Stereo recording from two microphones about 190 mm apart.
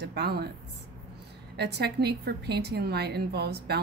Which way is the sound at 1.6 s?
60° right (ahead or behind).